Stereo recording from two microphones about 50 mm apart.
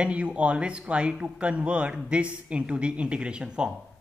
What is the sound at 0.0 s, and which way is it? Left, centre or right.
Speech, right.